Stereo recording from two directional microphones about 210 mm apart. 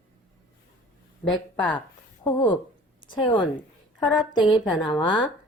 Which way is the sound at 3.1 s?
20° left (ahead or behind).